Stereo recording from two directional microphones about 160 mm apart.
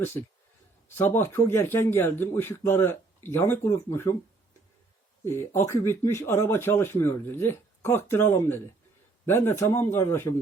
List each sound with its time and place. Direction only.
0.0 s a man's voice: 15° left (ahead or behind)
5.5 s a man's voice: 15° left (ahead or behind)